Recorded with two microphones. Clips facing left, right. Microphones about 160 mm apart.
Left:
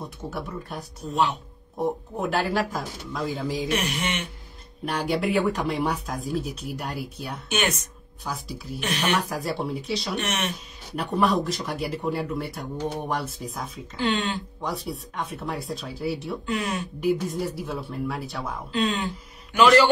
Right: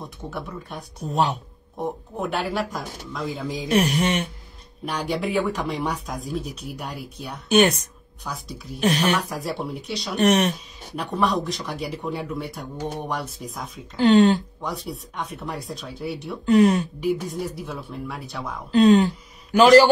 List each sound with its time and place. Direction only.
0.0 s speech: centre (ahead or behind)
3.7 s speech: 35° right (ahead or behind)
4.8 s speech: centre (ahead or behind)
7.4 s speech: 35° right (ahead or behind)
8.2 s speech: centre (ahead or behind)
8.7 s speech: 35° right (ahead or behind)
9.3 s speech: centre (ahead or behind)
10.1 s speech: 35° right (ahead or behind)
11.0 s speech: centre (ahead or behind)
13.9 s speech: 40° right (ahead or behind)
14.6 s speech: centre (ahead or behind)
16.4 s speech: 40° right (ahead or behind)
17.0 s speech: centre (ahead or behind)
18.7 s speech: 40° right (ahead or behind)